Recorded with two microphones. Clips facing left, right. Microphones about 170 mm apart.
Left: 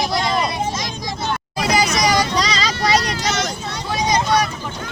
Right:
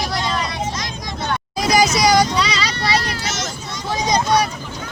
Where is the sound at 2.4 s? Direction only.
40° left (ahead or behind).